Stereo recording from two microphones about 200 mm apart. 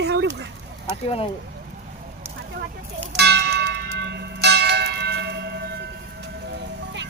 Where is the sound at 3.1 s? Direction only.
55° right (ahead or behind).